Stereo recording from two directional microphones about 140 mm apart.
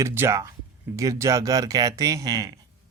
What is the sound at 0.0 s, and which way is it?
Speech, 20° right (ahead or behind).